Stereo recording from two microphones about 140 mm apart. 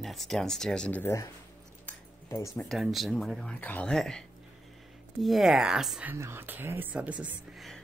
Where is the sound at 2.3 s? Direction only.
20° left (ahead or behind).